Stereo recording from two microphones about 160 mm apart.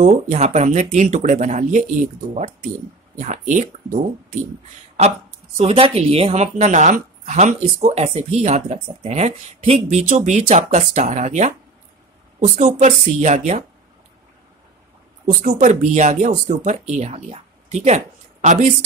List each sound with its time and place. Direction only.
0.0 s speech: 45° right (ahead or behind)
5.6 s speech: 35° right (ahead or behind)
15.2 s speech: 50° right (ahead or behind)